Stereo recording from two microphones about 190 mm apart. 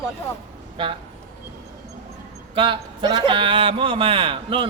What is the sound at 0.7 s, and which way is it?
Speech, 25° right (ahead or behind).